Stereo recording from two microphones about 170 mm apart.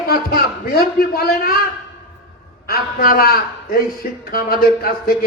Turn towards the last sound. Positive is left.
turn(degrees=60)  # may be behind; listen again after turning